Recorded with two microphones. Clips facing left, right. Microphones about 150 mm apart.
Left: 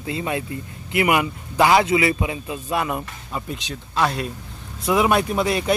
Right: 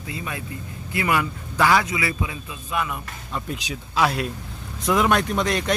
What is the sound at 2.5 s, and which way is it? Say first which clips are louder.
Speech: left 4 dB; 35° left (ahead or behind).